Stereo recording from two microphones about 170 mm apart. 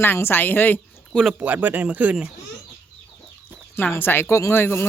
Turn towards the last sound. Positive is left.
turn(degrees=15)  # may be behind; listen again after turning